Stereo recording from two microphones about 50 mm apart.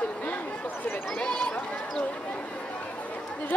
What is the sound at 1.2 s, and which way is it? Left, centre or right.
Speech, centre.